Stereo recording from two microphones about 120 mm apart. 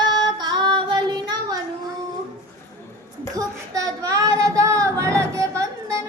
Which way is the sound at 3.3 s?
30° right (ahead or behind).